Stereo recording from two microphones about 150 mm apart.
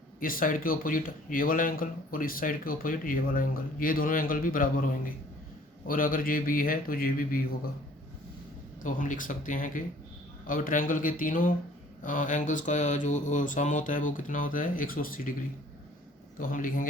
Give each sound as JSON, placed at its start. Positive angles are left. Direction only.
{"t": 0.2, "sound": "speech", "side_deg": 70}
{"t": 8.8, "sound": "speech", "side_deg": 65}